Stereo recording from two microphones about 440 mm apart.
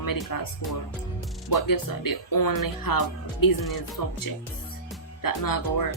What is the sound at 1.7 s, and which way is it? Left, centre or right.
Speech, left.